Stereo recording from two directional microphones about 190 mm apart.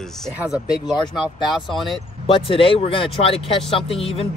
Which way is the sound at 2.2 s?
30° left (ahead or behind).